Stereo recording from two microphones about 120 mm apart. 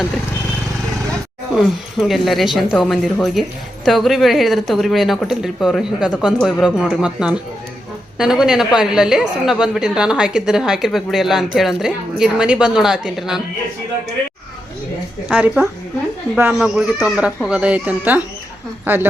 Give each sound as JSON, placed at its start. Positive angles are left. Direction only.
{"t": 1.5, "sound": "a woman's voice", "side_deg": 0}
{"t": 15.3, "sound": "a woman's voice", "side_deg": -10}